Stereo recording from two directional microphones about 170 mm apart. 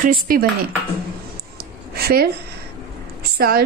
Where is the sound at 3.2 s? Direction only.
65° right (ahead or behind).